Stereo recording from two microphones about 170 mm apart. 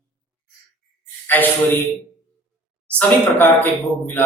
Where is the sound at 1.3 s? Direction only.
10° left (ahead or behind).